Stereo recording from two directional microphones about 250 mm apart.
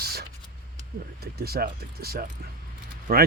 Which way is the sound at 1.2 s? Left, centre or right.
Right.